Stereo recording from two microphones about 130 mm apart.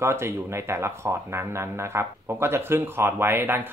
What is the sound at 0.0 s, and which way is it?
Speech, 20° right (ahead or behind).